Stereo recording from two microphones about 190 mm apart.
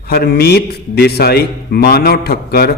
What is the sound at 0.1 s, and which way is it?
A man's voice, 55° left (ahead or behind).